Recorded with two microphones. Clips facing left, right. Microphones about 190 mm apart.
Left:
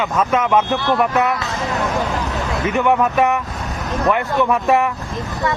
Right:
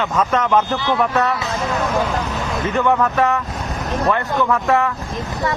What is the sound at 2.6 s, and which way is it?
Speech, 15° left (ahead or behind).